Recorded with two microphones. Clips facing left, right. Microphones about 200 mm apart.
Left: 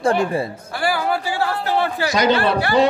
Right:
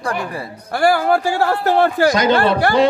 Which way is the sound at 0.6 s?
45° right (ahead or behind).